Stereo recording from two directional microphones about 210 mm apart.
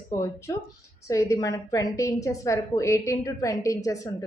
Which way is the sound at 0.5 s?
15° left (ahead or behind).